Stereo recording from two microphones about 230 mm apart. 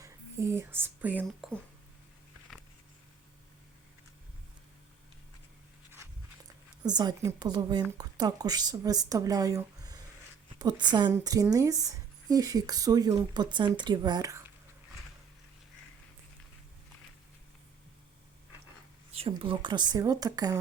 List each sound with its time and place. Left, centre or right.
0.0 s speech: centre
6.8 s a woman's voice: centre
19.1 s a woman's voice: right